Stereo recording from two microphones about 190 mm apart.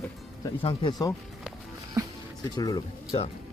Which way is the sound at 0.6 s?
25° left (ahead or behind).